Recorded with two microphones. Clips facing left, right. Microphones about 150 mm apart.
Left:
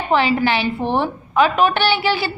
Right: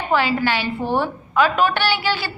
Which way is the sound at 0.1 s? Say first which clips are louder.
Left 3 dB; 20° left (ahead or behind).